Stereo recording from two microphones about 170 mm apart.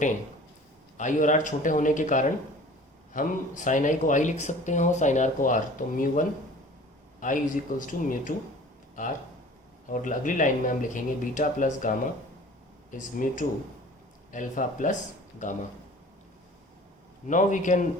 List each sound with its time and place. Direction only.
0.9 s speech: 45° left (ahead or behind)
17.2 s speech: 50° left (ahead or behind)